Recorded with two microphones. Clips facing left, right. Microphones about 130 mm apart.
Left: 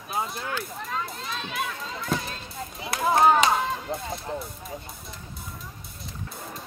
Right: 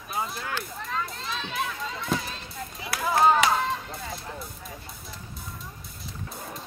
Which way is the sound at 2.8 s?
25° left (ahead or behind).